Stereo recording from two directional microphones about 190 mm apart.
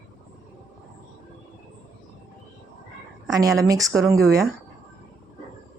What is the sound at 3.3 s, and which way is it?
Speech, 20° right (ahead or behind).